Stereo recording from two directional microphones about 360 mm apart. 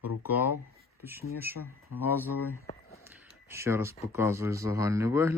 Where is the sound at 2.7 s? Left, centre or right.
Centre.